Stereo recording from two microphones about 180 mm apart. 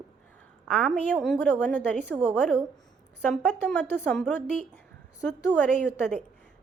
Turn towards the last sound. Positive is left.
turn(degrees=5)  # may be behind; listen again after turning